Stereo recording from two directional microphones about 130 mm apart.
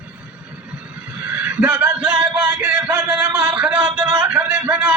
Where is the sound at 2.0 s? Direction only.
30° right (ahead or behind).